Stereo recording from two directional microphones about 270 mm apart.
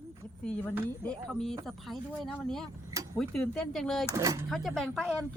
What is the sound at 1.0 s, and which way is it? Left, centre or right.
Speech, centre.